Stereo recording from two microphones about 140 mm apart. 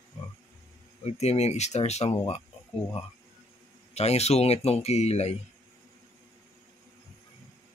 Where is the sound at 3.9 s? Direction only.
50° left (ahead or behind).